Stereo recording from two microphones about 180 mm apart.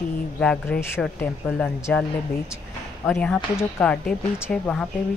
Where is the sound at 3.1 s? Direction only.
5° left (ahead or behind).